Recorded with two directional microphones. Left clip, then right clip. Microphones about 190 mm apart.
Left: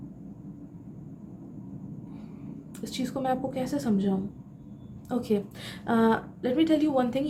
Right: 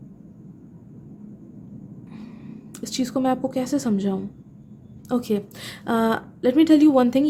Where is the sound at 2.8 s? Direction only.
45° right (ahead or behind).